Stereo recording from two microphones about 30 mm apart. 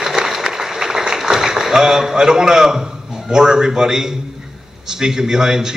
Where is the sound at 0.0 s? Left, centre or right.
Centre.